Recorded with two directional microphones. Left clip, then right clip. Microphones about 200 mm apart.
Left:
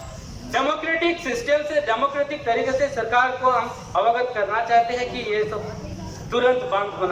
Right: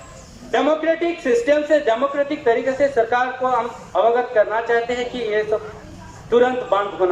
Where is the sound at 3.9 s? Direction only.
35° right (ahead or behind).